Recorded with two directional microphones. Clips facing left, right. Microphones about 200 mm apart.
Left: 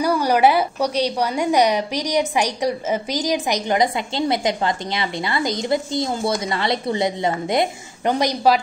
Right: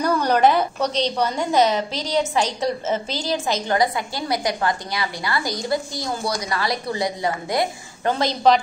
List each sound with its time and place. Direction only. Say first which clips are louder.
0.0 s a woman's voice: left 1 dB; 10° left (ahead or behind)